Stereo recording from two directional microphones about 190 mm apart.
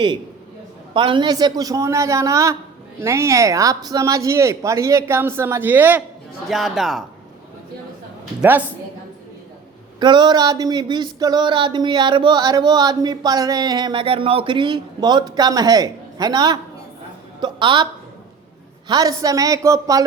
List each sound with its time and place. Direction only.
0.9 s a man's voice: 25° right (ahead or behind); by 7.0 s centre (ahead or behind)
8.4 s speech: 10° right (ahead or behind)
10.0 s a sound: 25° right (ahead or behind)
17.4 s speech: 25° right (ahead or behind)
18.9 s speech: 20° right (ahead or behind)